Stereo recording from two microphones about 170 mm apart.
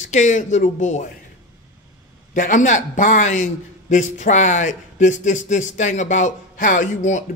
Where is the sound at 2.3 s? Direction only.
50° left (ahead or behind).